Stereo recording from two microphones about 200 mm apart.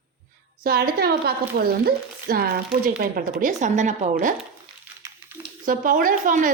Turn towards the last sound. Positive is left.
turn(degrees=-40)  # may be behind; listen again after turning